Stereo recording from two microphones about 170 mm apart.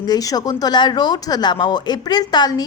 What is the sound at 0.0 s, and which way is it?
Speech, 20° left (ahead or behind).